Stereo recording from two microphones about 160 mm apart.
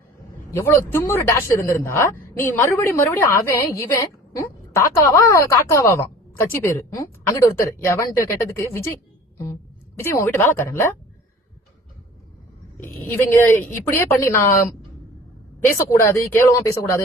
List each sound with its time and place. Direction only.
0.5 s a woman's voice: 15° left (ahead or behind)
12.7 s a woman's voice: 10° left (ahead or behind)
15.9 s a woman's voice: 15° left (ahead or behind)